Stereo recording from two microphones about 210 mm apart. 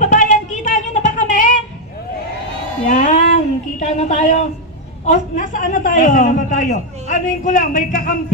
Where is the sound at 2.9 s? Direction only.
35° left (ahead or behind).